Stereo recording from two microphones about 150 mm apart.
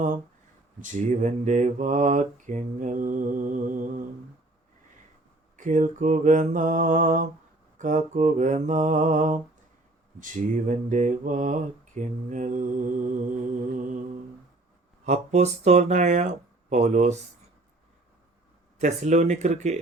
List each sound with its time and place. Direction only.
0.8 s mantra: 60° right (ahead or behind)
5.5 s mantra: 60° right (ahead or behind)
15.0 s speech: 50° right (ahead or behind)
18.8 s speech: 50° right (ahead or behind)